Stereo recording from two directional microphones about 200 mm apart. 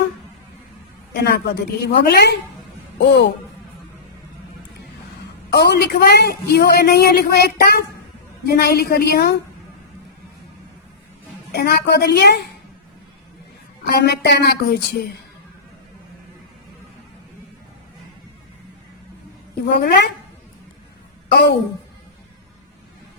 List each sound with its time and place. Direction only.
1.1 s a woman's voice: 55° left (ahead or behind)
5.5 s a woman's voice: 55° left (ahead or behind)
11.5 s a woman's voice: 55° left (ahead or behind)
13.8 s a woman's voice: 55° left (ahead or behind)
19.6 s a woman's voice: 50° left (ahead or behind)